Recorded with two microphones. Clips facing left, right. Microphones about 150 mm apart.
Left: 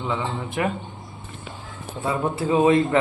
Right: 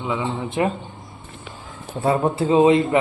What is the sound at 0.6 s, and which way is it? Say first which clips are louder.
Speech: right 3 dB; 25° right (ahead or behind).